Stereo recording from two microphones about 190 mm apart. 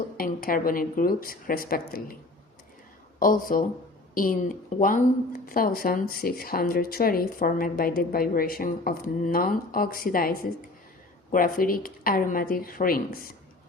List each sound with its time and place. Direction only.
0.2 s speech: 50° left (ahead or behind)
3.2 s speech: 45° left (ahead or behind)